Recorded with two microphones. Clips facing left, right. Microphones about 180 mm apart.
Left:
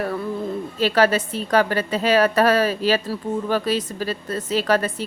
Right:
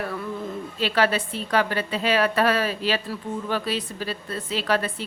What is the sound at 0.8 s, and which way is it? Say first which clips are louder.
A woman's voice: left 4 dB; 40° left (ahead or behind).